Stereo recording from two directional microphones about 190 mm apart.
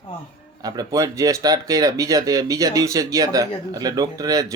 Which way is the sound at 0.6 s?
20° right (ahead or behind).